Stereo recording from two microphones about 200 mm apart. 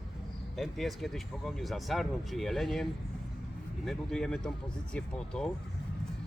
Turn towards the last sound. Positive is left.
turn(degrees=5)  # may be behind; listen again after turning